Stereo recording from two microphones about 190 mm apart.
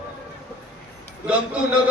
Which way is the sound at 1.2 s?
5° right (ahead or behind).